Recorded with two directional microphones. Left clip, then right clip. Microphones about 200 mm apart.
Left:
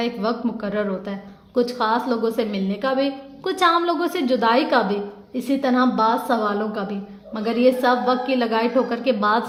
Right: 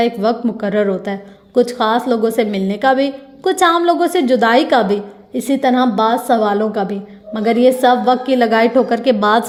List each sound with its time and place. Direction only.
0.0 s a woman's voice: 35° right (ahead or behind)